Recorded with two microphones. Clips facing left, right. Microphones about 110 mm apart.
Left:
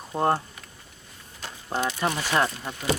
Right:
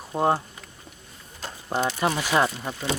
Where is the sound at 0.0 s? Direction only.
5° right (ahead or behind).